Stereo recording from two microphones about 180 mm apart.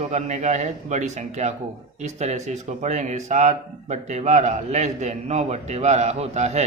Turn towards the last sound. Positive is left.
turn(degrees=-35)  # may be behind; listen again after turning